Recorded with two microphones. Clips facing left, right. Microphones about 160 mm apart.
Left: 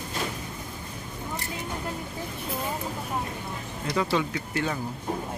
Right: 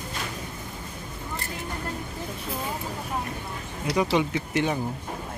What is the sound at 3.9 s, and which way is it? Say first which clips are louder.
Speech: right 3 dB; 20° right (ahead or behind).